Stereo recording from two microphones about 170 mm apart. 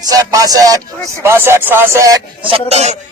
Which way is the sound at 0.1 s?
20° right (ahead or behind).